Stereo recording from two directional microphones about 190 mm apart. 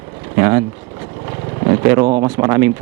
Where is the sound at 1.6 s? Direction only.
25° right (ahead or behind).